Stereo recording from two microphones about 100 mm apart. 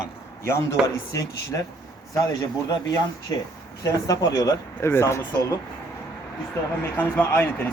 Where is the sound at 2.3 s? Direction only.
35° left (ahead or behind).